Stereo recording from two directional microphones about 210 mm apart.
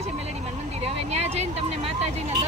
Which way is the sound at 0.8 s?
30° right (ahead or behind).